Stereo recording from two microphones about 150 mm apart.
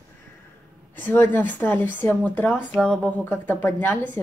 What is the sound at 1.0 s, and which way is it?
Speech, 15° left (ahead or behind).